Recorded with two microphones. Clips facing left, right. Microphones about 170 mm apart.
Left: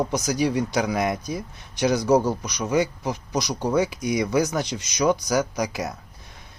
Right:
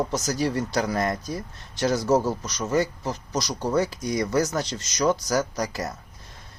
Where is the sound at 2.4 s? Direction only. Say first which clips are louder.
Left 1 dB; 15° left (ahead or behind).